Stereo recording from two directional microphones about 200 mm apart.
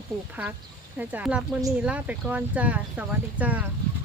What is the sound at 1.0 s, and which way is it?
Speech, 10° right (ahead or behind).